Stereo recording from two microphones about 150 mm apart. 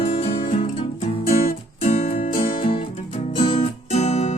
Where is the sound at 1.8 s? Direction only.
45° left (ahead or behind).